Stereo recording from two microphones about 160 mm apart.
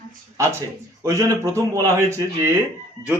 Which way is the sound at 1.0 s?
20° right (ahead or behind).